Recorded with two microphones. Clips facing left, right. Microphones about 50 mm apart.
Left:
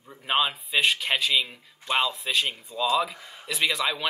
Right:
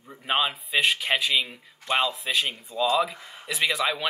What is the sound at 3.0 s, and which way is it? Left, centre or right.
Speech, centre.